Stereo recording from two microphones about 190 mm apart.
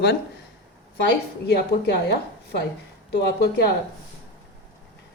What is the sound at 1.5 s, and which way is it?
A woman's voice, 60° left (ahead or behind).